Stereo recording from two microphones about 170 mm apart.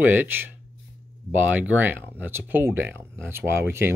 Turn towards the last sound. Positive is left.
turn(degrees=-15)  # may be behind; listen again after turning